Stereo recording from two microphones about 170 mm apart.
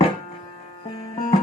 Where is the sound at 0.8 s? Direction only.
35° left (ahead or behind).